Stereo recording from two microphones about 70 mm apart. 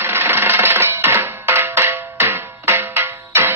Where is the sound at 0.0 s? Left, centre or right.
Right.